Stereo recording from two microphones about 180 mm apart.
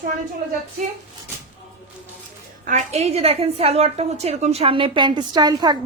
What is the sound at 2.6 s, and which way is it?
A woman's voice, 40° right (ahead or behind).